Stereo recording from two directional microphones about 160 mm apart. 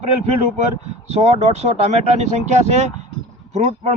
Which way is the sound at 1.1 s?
40° right (ahead or behind).